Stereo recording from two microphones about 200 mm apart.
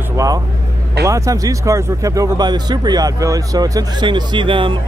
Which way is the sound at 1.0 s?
15° right (ahead or behind).